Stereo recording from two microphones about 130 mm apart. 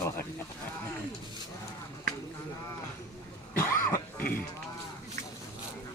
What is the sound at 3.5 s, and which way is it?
Cough, 20° left (ahead or behind).